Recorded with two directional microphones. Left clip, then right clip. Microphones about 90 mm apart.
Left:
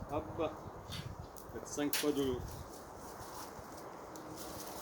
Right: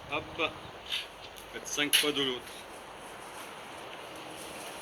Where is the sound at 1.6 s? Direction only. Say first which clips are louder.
Right 9 dB; 35° left (ahead or behind).